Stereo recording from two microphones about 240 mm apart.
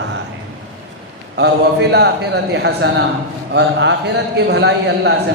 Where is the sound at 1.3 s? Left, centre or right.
Right.